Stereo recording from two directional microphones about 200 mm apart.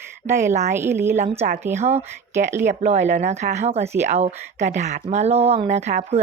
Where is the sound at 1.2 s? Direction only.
35° right (ahead or behind).